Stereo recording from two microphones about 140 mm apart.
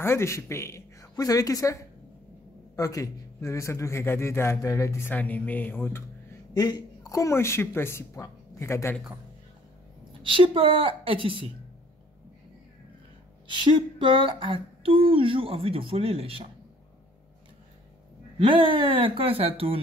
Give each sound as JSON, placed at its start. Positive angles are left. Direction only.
{"t": 0.0, "sound": "a woman's voice", "side_deg": 20}
{"t": 6.5, "sound": "speech", "side_deg": 30}
{"t": 10.2, "sound": "a woman's voice", "side_deg": -40}
{"t": 13.9, "sound": "a woman's voice", "side_deg": -35}
{"t": 18.4, "sound": "a woman's voice", "side_deg": -40}